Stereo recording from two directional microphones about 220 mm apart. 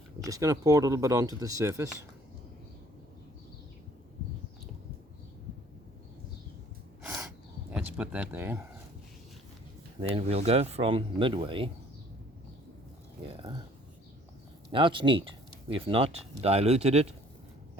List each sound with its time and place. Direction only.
0.3 s speech: 15° right (ahead or behind)
7.7 s speech: 5° right (ahead or behind)
10.0 s speech: 25° right (ahead or behind)
13.2 s speech: 25° right (ahead or behind)
14.7 s speech: 20° right (ahead or behind)